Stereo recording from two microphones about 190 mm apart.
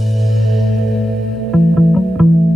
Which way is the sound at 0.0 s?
Centre (ahead or behind).